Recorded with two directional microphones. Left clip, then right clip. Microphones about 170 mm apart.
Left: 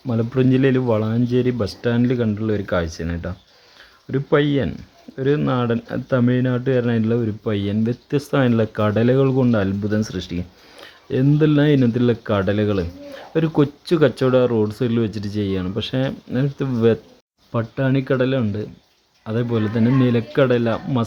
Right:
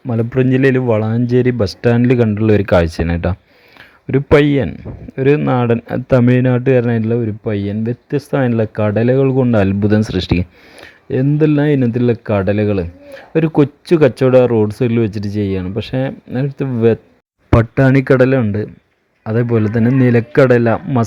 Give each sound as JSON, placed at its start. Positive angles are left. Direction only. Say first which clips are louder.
{"t": 0.1, "sound": "speech", "louder": "right 4 dB", "side_deg": -25}
{"t": 1.1, "sound": "speech", "louder": "right 5 dB", "side_deg": -35}
{"t": 9.5, "sound": "speech", "louder": "right 7 dB", "side_deg": -35}
{"t": 10.8, "sound": "speech", "louder": "right 4 dB", "side_deg": -25}
{"t": 17.6, "sound": "speech", "louder": "right 7 dB", "side_deg": -45}